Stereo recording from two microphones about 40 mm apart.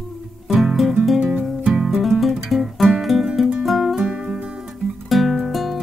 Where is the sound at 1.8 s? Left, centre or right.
Centre.